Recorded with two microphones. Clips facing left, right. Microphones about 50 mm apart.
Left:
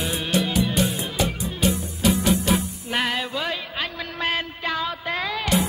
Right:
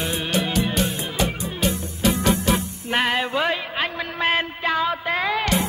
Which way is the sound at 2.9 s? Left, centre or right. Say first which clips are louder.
Right 4 dB; centre.